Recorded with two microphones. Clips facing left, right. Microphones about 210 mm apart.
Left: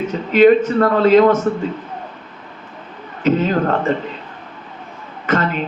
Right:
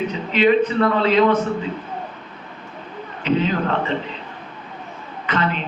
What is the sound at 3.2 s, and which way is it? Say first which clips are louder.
Speech: left 4 dB; 45° left (ahead or behind).